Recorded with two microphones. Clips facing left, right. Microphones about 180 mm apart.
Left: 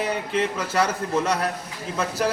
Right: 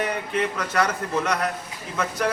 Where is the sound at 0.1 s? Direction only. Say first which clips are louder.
Left 1 dB; 30° left (ahead or behind).